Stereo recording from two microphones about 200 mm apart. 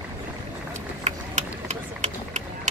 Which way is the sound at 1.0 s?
35° right (ahead or behind).